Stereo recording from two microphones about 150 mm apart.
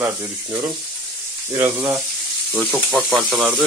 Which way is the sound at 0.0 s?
15° right (ahead or behind).